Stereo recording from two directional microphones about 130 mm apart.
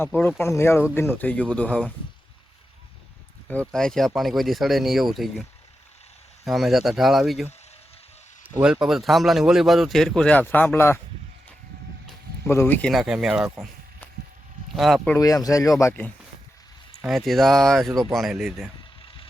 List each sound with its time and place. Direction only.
0.2 s speech: 15° left (ahead or behind)
3.7 s a man's voice: 5° left (ahead or behind)
8.6 s a man's voice: 5° right (ahead or behind); by 11.0 s 20° left (ahead or behind)
12.5 s speech: 15° left (ahead or behind)
12.9 s a man's voice: 5° right (ahead or behind)
14.8 s a man's voice: centre (ahead or behind)
15.2 s speech: 25° left (ahead or behind)
17.1 s a man's voice: centre (ahead or behind)